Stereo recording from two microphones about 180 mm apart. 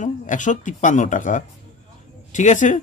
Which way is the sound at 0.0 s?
45° left (ahead or behind).